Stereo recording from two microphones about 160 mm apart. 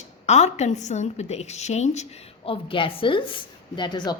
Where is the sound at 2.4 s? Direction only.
35° left (ahead or behind).